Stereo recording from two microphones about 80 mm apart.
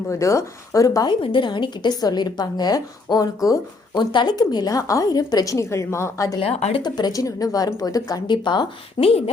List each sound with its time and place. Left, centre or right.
0.1 s speech: left
1.0 s a woman's voice: left
3.9 s a woman's voice: left
5.5 s speech: left
6.7 s speech: left
8.3 s speech: left